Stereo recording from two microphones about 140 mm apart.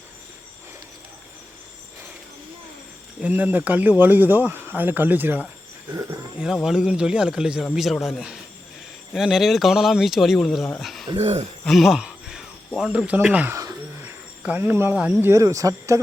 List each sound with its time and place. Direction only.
3.2 s speech: 10° right (ahead or behind)
5.9 s speech: 25° right (ahead or behind)
6.4 s a man's voice: 5° right (ahead or behind)
11.2 s speech: 50° right (ahead or behind)
11.6 s speech: centre (ahead or behind)
15.3 s speech: 25° right (ahead or behind)